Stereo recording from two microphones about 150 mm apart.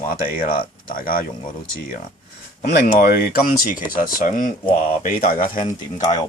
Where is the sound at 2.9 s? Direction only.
85° left; by 5.6 s 65° left (ahead or behind).